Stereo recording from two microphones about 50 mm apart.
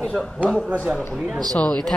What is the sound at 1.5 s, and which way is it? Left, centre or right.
Speech, centre.